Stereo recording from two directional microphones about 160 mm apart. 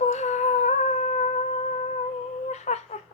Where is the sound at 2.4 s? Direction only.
45° left (ahead or behind).